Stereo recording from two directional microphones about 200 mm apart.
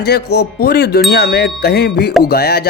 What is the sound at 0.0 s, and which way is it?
Speech, 55° left (ahead or behind).